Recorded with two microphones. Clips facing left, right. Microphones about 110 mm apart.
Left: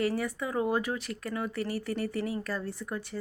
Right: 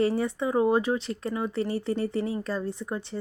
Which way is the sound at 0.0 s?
25° right (ahead or behind).